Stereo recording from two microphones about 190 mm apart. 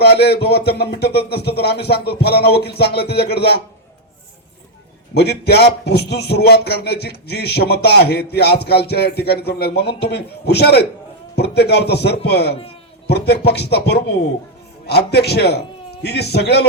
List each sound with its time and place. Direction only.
0.0 s a man's voice: 60° left (ahead or behind)
5.1 s a man's voice: 60° left (ahead or behind)